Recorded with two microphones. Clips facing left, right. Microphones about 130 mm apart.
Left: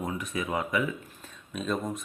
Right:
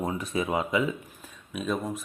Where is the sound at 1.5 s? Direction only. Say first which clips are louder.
Right 1 dB; 5° right (ahead or behind).